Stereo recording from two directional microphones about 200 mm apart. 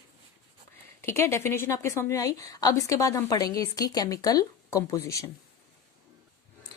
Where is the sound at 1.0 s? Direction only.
15° left (ahead or behind).